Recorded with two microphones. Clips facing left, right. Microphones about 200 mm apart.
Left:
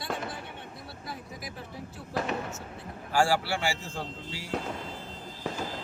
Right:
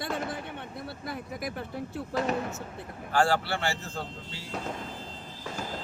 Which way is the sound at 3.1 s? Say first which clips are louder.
Even; 10° left (ahead or behind).